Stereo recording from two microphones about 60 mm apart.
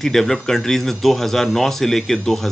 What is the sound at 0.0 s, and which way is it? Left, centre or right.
Speech, centre.